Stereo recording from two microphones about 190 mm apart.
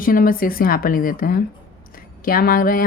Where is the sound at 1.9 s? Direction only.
50° left (ahead or behind).